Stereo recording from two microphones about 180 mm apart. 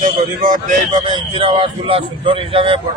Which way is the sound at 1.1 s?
30° right (ahead or behind).